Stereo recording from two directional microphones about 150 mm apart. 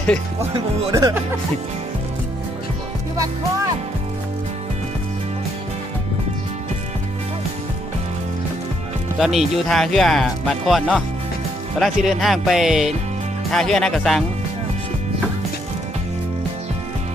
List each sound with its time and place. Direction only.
0.9 s speech: 20° right (ahead or behind)
9.1 s speech: centre (ahead or behind)